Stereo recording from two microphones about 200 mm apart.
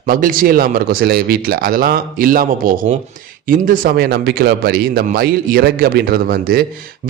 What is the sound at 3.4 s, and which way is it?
A man's voice, 45° right (ahead or behind).